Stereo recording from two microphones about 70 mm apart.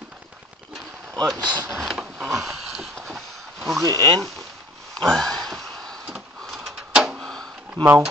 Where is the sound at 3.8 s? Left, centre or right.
Right.